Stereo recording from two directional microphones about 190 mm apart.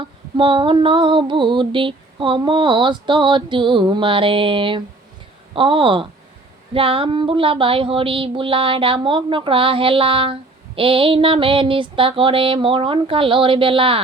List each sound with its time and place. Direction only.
0.0 s female singing: 25° right (ahead or behind)